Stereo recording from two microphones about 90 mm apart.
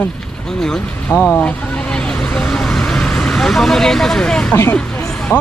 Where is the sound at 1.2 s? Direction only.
15° left (ahead or behind).